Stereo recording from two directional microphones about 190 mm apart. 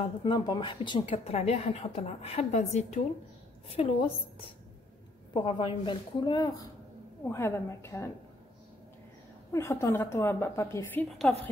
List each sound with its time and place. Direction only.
0.2 s a woman's voice: 25° left (ahead or behind)
9.5 s a woman's voice: 15° left (ahead or behind)